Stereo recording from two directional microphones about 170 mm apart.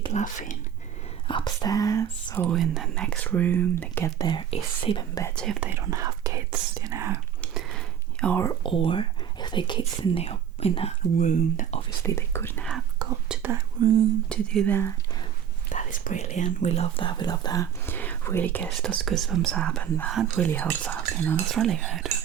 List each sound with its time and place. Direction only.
0.1 s speech: 45° left (ahead or behind)
1.3 s speech: 25° left (ahead or behind)
2.5 s speech: centre (ahead or behind); by 5.2 s 30° left (ahead or behind)
5.5 s whispering: 10° right (ahead or behind)
7.5 s whispering: 5° left (ahead or behind)
8.6 s speech: 30° left (ahead or behind); by 11.8 s 50° left (ahead or behind)
12.0 s speech: 15° left (ahead or behind)
13.2 s whispering: 5° right (ahead or behind)
13.8 s speech: 30° right (ahead or behind)
14.3 s speech: 5° left (ahead or behind)
15.7 s speech: 50° left (ahead or behind); by 22.1 s centre (ahead or behind)